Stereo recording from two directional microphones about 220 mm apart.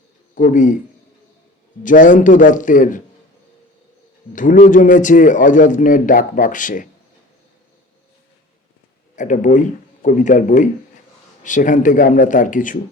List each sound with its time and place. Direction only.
0.3 s a man's voice: 35° left (ahead or behind)
1.8 s a man's voice: 35° left (ahead or behind)
4.4 s a man's voice: 35° left (ahead or behind)
9.1 s a man's voice: 35° left (ahead or behind)